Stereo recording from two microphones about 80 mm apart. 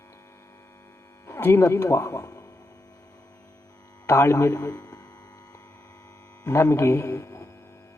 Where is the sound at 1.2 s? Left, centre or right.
Left.